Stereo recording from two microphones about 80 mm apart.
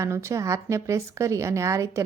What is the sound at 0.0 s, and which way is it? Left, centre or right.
A woman's voice, right.